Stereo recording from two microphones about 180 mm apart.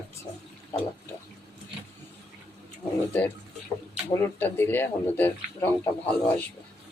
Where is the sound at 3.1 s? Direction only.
10° left (ahead or behind).